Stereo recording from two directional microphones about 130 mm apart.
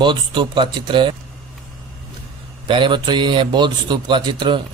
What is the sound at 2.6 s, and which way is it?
A man's voice, 40° right (ahead or behind).